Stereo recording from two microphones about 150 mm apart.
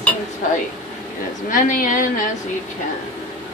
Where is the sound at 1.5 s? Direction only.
65° left (ahead or behind).